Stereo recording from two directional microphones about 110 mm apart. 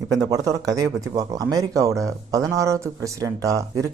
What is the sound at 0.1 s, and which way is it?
Speech, 35° right (ahead or behind).